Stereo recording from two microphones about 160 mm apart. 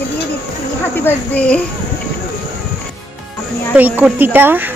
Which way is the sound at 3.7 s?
10° right (ahead or behind).